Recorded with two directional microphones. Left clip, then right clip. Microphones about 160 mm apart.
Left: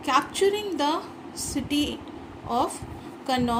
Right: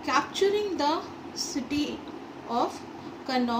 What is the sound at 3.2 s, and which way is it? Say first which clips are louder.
Speech: left 3 dB; 50° left (ahead or behind).